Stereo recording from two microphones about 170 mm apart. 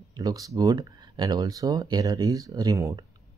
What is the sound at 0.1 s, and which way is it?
Speech, 20° right (ahead or behind).